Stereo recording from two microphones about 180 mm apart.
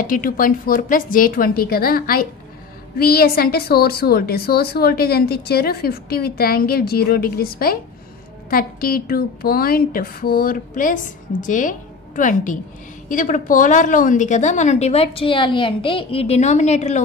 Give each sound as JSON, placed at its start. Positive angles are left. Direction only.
{"t": 0.0, "sound": "a woman's voice", "side_deg": 50}